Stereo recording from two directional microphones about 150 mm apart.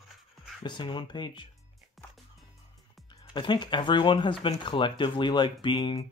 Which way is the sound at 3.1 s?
25° left (ahead or behind).